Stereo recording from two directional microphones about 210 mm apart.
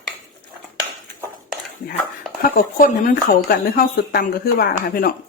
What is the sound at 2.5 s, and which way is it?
Speech, 40° left (ahead or behind).